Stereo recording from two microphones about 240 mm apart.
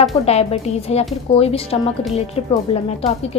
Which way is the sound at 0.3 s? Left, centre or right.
Left.